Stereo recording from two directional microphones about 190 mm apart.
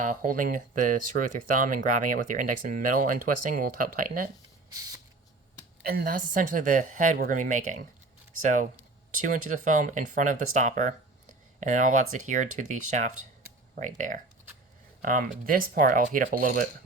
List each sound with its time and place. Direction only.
0.0 s speech: 45° right (ahead or behind)
5.8 s speech: 50° right (ahead or behind)